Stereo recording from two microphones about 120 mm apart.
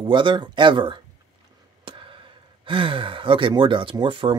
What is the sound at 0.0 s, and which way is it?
Speech, 40° right (ahead or behind).